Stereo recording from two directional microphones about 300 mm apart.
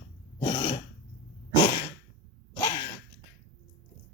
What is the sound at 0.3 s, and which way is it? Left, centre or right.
Throat clearing, centre.